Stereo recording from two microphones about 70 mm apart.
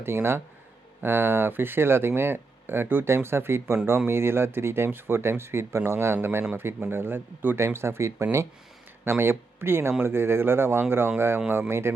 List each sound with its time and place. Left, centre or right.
0.0 s speech: right
11.7 s speech: right